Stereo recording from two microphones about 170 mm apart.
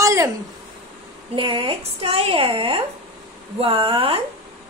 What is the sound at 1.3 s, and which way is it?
A woman's voice, 30° right (ahead or behind).